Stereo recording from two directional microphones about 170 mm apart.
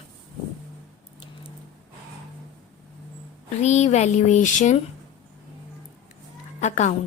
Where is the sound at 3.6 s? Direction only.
40° left (ahead or behind).